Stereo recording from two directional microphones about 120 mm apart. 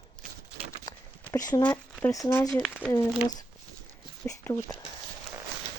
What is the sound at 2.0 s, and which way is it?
Speech, 25° left (ahead or behind).